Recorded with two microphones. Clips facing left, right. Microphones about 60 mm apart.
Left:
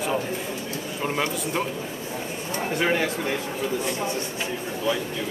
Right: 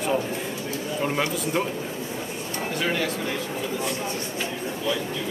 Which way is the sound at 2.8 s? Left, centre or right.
Left.